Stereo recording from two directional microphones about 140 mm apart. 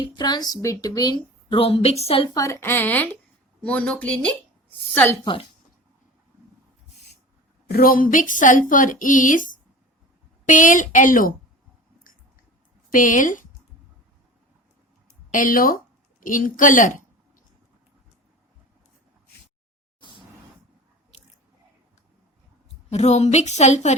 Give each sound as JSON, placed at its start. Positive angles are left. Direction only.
{"t": 0.0, "sound": "a woman's voice", "side_deg": 30}
{"t": 2.3, "sound": "speech", "side_deg": 20}
{"t": 7.7, "sound": "a woman's voice", "side_deg": 90}
{"t": 12.1, "sound": "chewing", "side_deg": 80}
{"t": 12.9, "sound": "speech", "side_deg": 70}
{"t": 15.3, "sound": "a woman's voice", "side_deg": 70}
{"t": 16.2, "sound": "a woman's voice", "side_deg": 70}
{"t": 22.7, "sound": "a woman's voice", "side_deg": 50}